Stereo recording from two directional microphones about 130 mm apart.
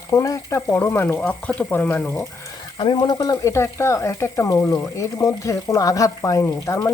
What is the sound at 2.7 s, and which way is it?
Speech, 40° left (ahead or behind).